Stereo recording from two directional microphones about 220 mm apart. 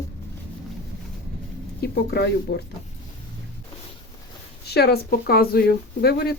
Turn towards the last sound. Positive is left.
turn(degrees=45)  # may be behind; listen again after turning